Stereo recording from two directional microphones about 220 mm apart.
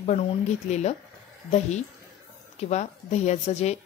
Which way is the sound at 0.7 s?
30° left (ahead or behind).